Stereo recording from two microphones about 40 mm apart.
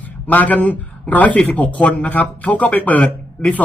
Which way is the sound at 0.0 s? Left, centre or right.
Left.